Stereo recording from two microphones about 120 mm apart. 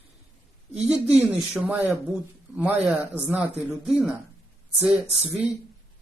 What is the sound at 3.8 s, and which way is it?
A man's voice, 5° right (ahead or behind).